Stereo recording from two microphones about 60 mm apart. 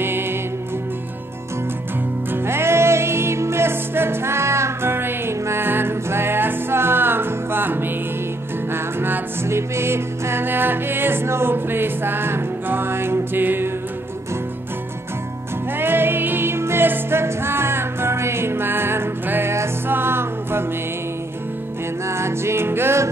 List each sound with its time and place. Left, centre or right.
0.0 s music: right
2.3 s music: right
15.8 s music: right
22.0 s music: right